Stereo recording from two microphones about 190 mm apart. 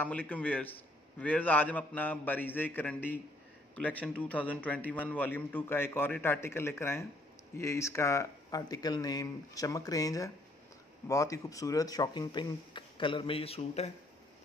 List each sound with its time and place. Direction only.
0.0 s a man's voice: 10° left (ahead or behind); by 13.9 s 35° left (ahead or behind)